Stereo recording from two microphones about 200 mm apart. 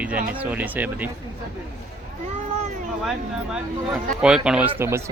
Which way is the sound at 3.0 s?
Centre (ahead or behind).